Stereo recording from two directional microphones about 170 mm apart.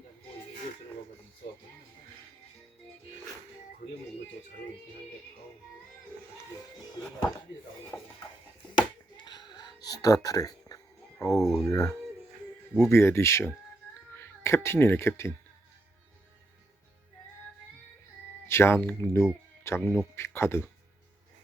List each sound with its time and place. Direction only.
3.8 s speech: 45° left (ahead or behind)
7.9 s speech: 10° left (ahead or behind)
8.7 s a sound: 25° left (ahead or behind)
11.2 s speech: 20° left (ahead or behind)
18.4 s speech: 15° left (ahead or behind)
19.8 s speech: centre (ahead or behind)
20.1 s speech: 15° left (ahead or behind)